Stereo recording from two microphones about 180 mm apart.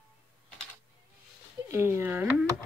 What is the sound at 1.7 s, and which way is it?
Speech, 15° right (ahead or behind).